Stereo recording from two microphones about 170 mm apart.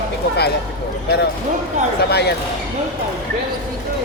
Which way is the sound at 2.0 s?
75° left (ahead or behind).